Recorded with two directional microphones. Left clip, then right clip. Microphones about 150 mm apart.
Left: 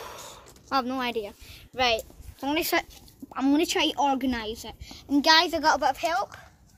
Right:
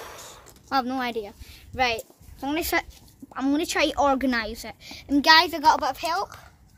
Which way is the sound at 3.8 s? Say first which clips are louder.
Right 3 dB; 35° right (ahead or behind).